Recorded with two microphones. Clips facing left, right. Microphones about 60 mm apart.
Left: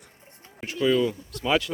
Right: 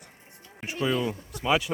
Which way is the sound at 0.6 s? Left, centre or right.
Right.